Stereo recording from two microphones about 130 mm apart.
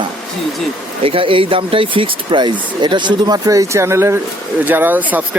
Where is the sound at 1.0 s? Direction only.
45° right (ahead or behind).